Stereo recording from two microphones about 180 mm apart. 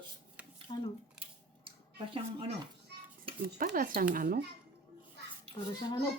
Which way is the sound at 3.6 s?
50° right (ahead or behind).